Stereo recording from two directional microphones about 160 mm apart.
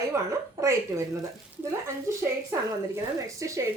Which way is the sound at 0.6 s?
20° right (ahead or behind).